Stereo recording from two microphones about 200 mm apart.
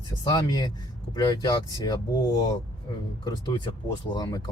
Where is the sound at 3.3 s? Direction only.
20° left (ahead or behind).